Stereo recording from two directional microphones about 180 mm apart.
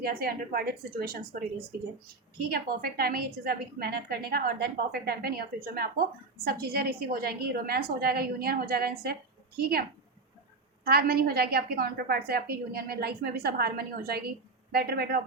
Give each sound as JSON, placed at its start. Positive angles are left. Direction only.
{"t": 0.0, "sound": "a woman's voice", "side_deg": -55}
{"t": 2.5, "sound": "a woman's voice", "side_deg": -55}
{"t": 10.8, "sound": "a woman's voice", "side_deg": -60}